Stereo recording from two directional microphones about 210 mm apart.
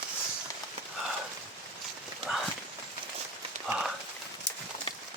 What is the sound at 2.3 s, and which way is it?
Horse, 5° right (ahead or behind).